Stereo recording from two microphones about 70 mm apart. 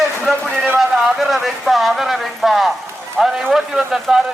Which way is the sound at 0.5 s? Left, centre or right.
Right.